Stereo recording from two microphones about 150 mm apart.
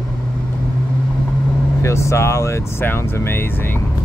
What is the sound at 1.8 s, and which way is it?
Speech, 20° left (ahead or behind).